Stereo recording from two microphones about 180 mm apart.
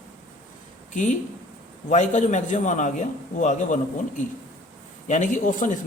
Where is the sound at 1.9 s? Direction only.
40° left (ahead or behind).